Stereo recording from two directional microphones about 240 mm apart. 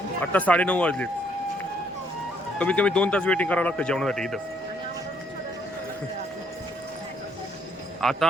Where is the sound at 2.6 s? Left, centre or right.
Centre.